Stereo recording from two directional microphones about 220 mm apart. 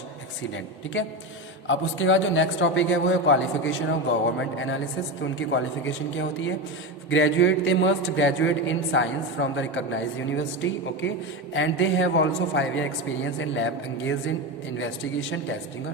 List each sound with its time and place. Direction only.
0.9 s a man's voice: 60° left (ahead or behind)